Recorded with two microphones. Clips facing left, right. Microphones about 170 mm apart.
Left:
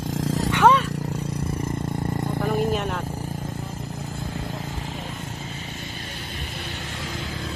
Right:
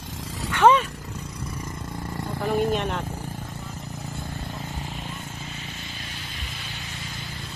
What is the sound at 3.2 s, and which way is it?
Vehicle, 40° left (ahead or behind).